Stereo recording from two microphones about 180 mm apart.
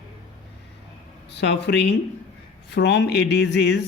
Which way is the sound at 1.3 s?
70° left (ahead or behind).